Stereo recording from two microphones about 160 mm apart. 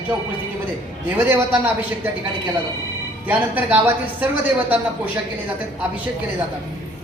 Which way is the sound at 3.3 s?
10° right (ahead or behind).